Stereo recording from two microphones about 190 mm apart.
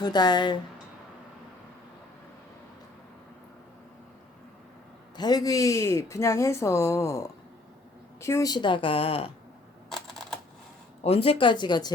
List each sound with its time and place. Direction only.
0.0 s a woman's voice: 20° left (ahead or behind)
5.1 s a woman's voice: 20° left (ahead or behind)
9.9 s a sound: 5° left (ahead or behind)
11.0 s a woman's voice: 30° left (ahead or behind)